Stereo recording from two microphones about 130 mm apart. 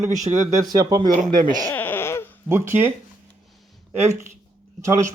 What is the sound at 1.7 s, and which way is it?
Baby cry, 15° left (ahead or behind).